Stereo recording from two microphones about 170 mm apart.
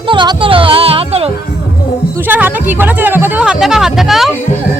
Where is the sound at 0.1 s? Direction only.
30° right (ahead or behind).